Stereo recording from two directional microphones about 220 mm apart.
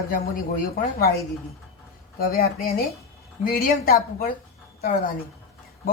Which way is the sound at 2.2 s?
45° left (ahead or behind).